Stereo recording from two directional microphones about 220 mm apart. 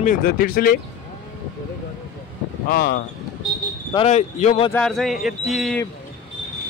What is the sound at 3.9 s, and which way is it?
Speech, 30° left (ahead or behind).